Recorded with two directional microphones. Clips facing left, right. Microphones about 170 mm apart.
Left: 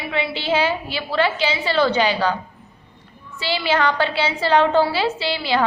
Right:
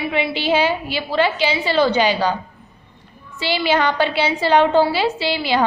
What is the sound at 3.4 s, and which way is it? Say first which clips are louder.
A woman's voice: right 2 dB; 15° right (ahead or behind).